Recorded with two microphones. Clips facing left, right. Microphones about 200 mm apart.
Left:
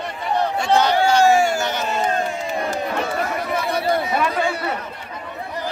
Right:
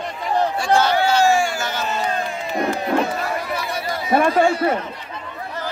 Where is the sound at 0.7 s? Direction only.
15° left (ahead or behind).